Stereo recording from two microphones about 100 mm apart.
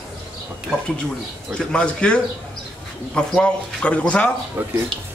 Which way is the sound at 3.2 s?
10° left (ahead or behind).